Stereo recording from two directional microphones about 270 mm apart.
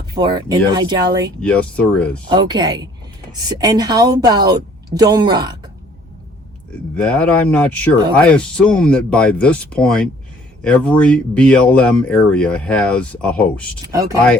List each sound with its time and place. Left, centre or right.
0.1 s a woman's voice: centre
1.4 s speech: centre
2.3 s a woman's voice: centre
6.9 s speech: centre
13.8 s a woman's voice: centre